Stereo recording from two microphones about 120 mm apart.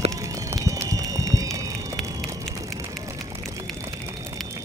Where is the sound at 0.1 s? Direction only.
30° right (ahead or behind).